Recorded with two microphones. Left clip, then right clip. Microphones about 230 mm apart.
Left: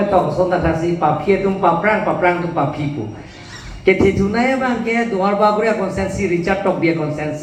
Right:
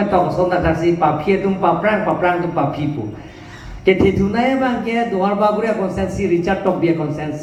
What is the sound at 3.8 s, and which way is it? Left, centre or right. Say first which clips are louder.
A man's voice: even; right.